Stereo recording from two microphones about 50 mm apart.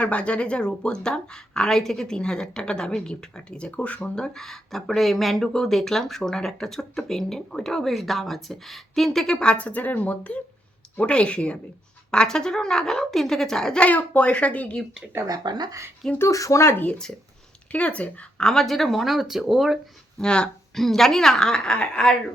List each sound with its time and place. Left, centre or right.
0.0 s speech: left
9.6 s speech: left; by 13.7 s centre
13.7 s speech: left
16.1 s speech: left
17.7 s speech: left
18.4 s speech: centre
20.1 s speech: centre
20.7 s speech: centre